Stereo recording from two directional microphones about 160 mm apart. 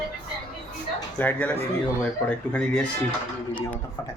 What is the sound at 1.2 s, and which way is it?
Speech, 10° left (ahead or behind).